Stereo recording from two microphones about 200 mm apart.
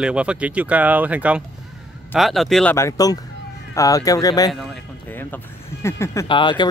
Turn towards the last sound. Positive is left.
turn(degrees=25)  # may be behind; listen again after turning